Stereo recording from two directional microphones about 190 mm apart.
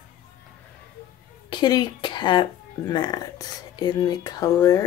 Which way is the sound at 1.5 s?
20° left (ahead or behind).